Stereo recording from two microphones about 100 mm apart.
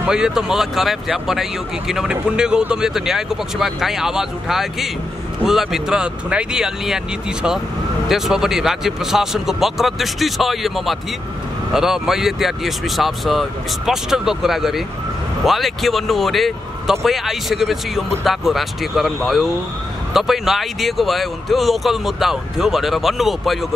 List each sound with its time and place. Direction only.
0.0 s speech: 5° right (ahead or behind)